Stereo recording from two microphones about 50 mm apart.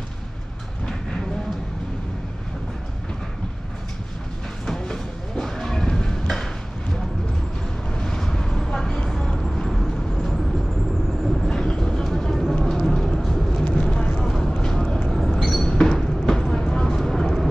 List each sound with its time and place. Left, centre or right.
4.6 s a sound: centre
7.9 s vehicle: centre
11.4 s vehicle: centre
13.7 s vehicle: centre